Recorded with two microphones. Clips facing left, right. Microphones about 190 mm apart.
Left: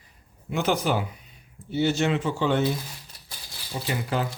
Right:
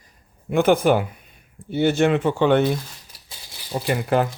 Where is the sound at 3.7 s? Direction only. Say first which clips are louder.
Right 7 dB; 55° right (ahead or behind).